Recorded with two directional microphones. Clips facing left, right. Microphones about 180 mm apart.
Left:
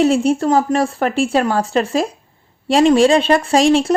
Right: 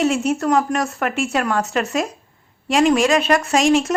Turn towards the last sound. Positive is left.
turn(degrees=35)  # may be behind; listen again after turning